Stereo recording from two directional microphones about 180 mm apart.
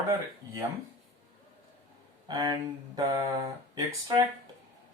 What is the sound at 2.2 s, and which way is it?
Speech, 20° right (ahead or behind).